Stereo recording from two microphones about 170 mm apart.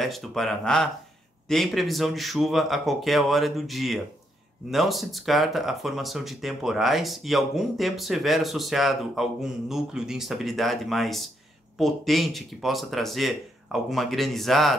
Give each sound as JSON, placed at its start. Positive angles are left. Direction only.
{"t": 0.0, "sound": "speech", "side_deg": 0}